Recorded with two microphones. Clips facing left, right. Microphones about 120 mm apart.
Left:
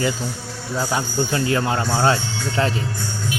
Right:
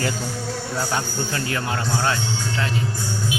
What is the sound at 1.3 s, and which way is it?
Speech, 25° left (ahead or behind).